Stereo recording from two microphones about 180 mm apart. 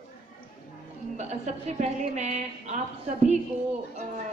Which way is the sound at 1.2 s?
40° right (ahead or behind).